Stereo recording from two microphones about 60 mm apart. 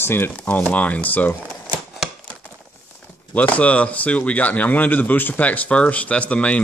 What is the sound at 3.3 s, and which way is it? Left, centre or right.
Speech, left.